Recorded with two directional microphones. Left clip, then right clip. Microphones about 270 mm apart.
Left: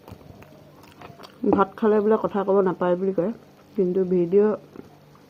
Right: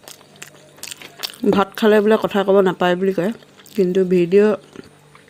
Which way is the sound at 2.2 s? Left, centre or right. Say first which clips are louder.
Right 6 dB; right.